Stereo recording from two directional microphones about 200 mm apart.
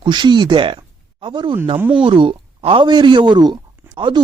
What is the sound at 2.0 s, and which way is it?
Speech, 25° right (ahead or behind).